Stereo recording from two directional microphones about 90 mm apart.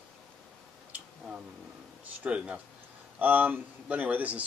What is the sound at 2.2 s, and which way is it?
Speech, 15° right (ahead or behind).